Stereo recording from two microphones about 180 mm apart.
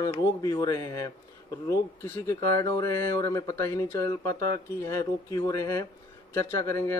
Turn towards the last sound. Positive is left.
turn(degrees=15)  # may be behind; listen again after turning